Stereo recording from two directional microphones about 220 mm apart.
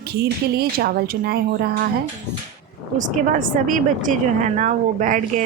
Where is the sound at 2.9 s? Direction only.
35° right (ahead or behind).